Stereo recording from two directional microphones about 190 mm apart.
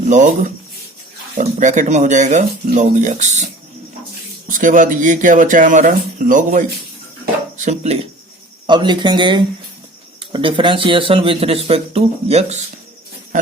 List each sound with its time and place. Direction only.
0.1 s speech: 40° right (ahead or behind)
1.4 s speech: 40° right (ahead or behind)
8.6 s speech: 25° right (ahead or behind)